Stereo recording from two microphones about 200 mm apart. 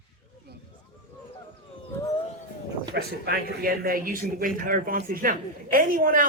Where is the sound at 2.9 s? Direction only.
50° right (ahead or behind).